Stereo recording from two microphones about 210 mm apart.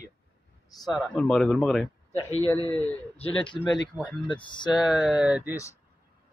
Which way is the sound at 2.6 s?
10° left (ahead or behind).